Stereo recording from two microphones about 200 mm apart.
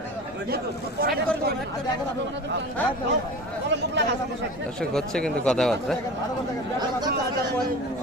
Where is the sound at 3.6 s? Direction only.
60° right (ahead or behind).